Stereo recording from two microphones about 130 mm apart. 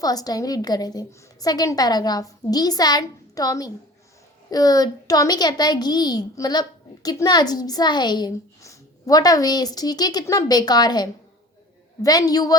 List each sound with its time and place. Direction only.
0.0 s a woman's voice: 30° left (ahead or behind)